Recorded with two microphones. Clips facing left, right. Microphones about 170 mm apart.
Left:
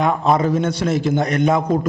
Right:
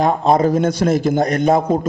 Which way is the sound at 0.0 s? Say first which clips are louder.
Right 3 dB; 35° right (ahead or behind).